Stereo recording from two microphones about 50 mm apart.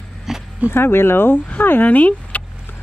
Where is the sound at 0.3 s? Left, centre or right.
Centre.